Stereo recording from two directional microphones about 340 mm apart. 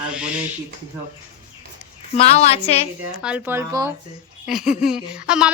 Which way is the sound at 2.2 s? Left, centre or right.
Centre.